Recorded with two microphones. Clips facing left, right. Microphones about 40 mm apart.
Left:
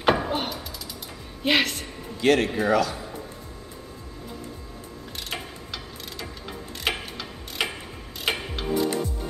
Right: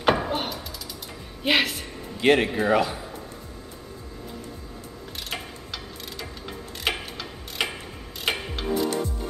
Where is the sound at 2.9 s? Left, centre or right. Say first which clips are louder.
Left 1 dB; centre.